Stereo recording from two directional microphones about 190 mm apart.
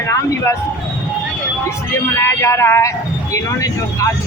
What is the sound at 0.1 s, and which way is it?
Speech, 15° left (ahead or behind).